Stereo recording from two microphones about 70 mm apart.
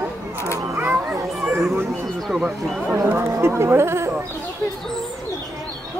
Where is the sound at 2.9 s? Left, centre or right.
Right.